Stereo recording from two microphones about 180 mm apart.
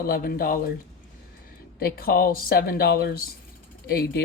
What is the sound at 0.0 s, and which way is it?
Speech, 55° left (ahead or behind).